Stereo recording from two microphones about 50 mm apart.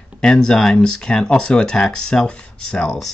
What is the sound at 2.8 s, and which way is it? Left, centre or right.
Speech, centre.